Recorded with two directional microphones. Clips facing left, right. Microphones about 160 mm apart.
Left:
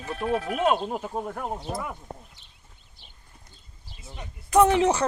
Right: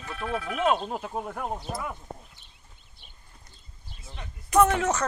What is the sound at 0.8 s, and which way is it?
Speech, 5° left (ahead or behind).